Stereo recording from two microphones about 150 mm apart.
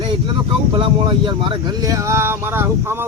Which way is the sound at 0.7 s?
30° right (ahead or behind).